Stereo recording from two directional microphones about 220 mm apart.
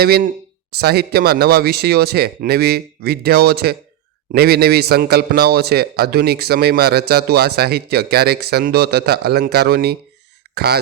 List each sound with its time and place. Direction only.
0.0 s speech: 45° right (ahead or behind)